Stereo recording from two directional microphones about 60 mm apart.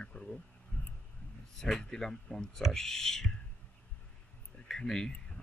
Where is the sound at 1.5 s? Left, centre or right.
Centre.